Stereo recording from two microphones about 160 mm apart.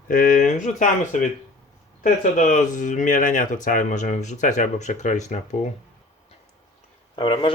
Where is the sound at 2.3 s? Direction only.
50° left (ahead or behind).